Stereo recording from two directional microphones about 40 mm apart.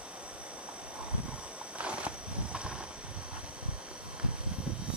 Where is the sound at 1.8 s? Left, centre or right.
Right.